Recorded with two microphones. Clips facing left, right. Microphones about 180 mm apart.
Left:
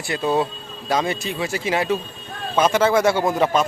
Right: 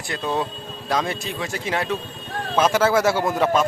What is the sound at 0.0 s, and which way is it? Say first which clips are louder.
A man's voice: left 4 dB; 5° left (ahead or behind).